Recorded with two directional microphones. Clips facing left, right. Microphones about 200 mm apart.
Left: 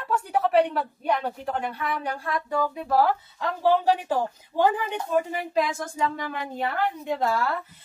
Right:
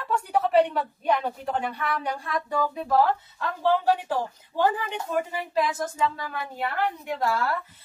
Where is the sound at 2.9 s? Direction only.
10° left (ahead or behind).